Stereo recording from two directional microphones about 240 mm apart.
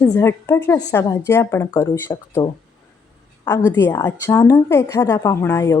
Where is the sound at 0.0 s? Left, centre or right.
Centre.